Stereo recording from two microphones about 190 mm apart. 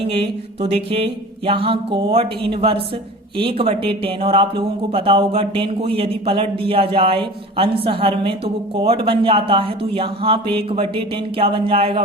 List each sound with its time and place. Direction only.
0.0 s speech: 30° right (ahead or behind)